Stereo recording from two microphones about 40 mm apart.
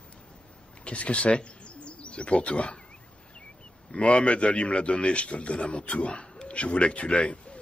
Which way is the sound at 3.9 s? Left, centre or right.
Left.